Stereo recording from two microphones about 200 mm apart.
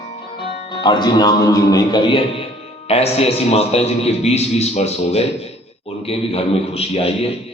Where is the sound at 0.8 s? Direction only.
20° left (ahead or behind).